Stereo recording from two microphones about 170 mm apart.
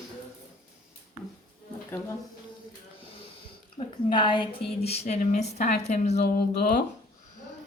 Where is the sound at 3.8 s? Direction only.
35° left (ahead or behind).